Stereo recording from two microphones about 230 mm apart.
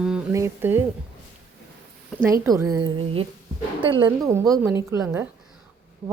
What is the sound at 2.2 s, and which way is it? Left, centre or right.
A woman's voice, centre.